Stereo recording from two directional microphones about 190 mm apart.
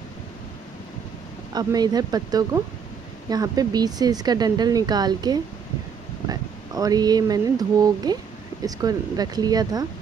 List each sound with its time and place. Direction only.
1.5 s speech: 20° right (ahead or behind)